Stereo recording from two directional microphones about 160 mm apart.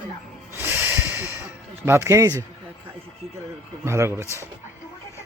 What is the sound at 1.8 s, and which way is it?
Speech, 15° right (ahead or behind).